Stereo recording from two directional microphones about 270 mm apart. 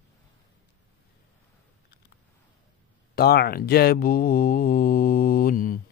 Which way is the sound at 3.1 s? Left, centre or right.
Left.